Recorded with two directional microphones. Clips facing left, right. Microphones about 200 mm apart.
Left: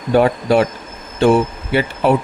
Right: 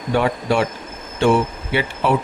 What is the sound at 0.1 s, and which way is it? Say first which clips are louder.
Speech: left 5 dB; 40° left (ahead or behind).